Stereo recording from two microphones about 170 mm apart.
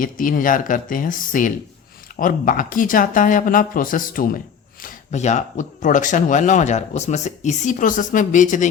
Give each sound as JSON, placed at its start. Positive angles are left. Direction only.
{"t": 0.0, "sound": "speech", "side_deg": 55}